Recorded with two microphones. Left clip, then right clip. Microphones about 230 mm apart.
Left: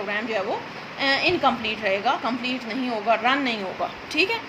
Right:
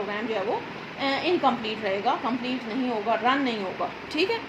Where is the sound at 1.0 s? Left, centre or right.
Left.